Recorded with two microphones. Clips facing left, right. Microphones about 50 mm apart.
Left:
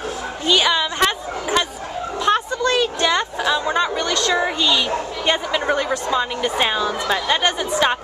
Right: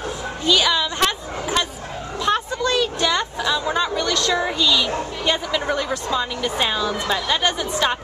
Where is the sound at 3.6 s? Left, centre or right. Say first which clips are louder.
Left 1 dB; centre.